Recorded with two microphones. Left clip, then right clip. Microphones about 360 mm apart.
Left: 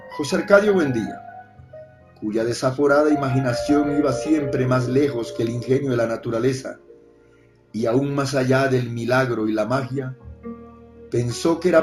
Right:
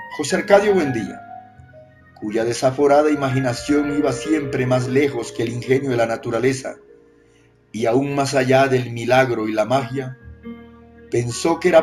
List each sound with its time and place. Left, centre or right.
0.2 s speech: right
2.3 s speech: right
7.7 s speech: right
11.1 s speech: right